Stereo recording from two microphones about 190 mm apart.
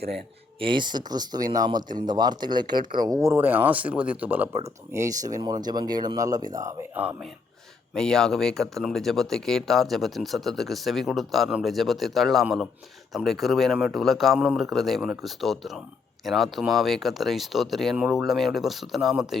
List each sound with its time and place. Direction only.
0.6 s speech: 25° right (ahead or behind); by 7.3 s 10° right (ahead or behind)
7.9 s speech: 5° left (ahead or behind)